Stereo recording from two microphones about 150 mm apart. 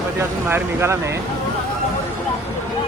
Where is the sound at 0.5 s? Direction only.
15° right (ahead or behind).